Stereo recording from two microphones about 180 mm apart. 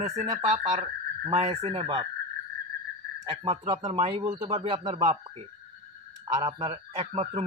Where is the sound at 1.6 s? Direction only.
35° right (ahead or behind).